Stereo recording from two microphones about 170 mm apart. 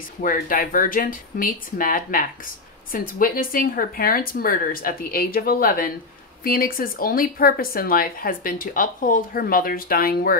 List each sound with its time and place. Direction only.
0.2 s speech: 55° left (ahead or behind)